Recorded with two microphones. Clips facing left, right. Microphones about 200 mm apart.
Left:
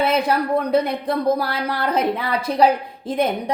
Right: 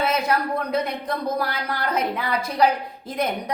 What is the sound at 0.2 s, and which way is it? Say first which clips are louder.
A woman's voice: left 4 dB; 30° left (ahead or behind).